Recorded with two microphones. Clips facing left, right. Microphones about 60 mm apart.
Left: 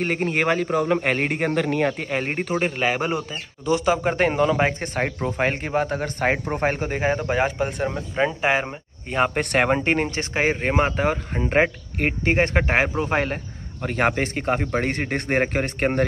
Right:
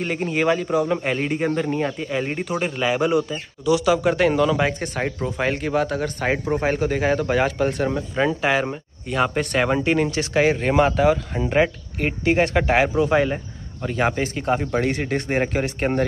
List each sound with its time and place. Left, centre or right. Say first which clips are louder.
0.0 s speech: even; left; by 8.4 s centre
8.4 s speech: right 1 dB; left
9.4 s speech: even; left
9.8 s speech: right 2 dB; left
11.4 s speech: even; left
14.4 s speech: right 3 dB; left